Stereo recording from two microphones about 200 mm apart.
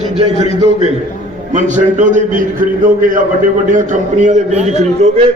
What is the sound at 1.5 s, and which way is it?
A man's voice, 40° right (ahead or behind).